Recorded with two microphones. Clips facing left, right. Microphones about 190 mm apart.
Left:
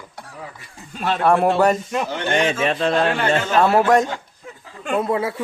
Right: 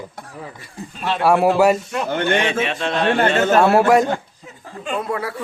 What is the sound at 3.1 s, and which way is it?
Speech, 45° right (ahead or behind).